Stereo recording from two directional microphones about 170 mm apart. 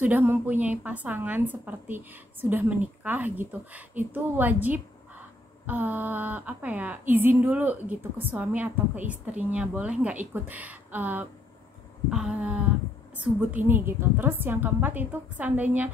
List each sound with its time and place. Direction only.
0.0 s a woman's voice: 10° right (ahead or behind)